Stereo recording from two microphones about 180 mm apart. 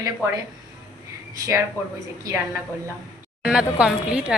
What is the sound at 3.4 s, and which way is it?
Speech, 5° right (ahead or behind).